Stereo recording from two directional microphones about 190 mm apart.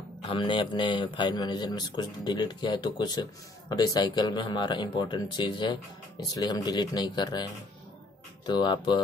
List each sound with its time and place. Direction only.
0.3 s speech: 25° left (ahead or behind)